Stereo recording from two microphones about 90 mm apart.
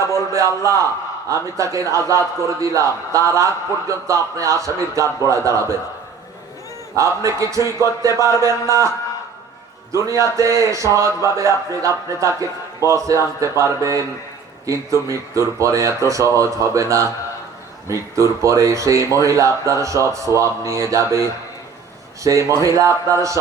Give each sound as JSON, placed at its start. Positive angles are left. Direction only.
{"t": 0.1, "sound": "a man's voice", "side_deg": -35}
{"t": 6.9, "sound": "a man's voice", "side_deg": -35}
{"t": 9.9, "sound": "a man's voice", "side_deg": -35}
{"t": 22.2, "sound": "a man's voice", "side_deg": -35}